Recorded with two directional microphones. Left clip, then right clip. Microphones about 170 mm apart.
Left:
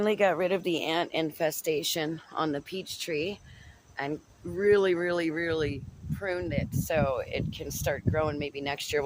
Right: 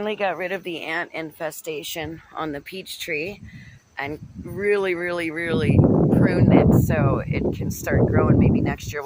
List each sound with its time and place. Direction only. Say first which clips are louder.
0.0 s a woman's voice: right 1 dB; 25° left (ahead or behind)
2.3 s speech: right 2 dB; 5° left (ahead or behind)
6.8 s speech: right 4 dB; 5° left (ahead or behind)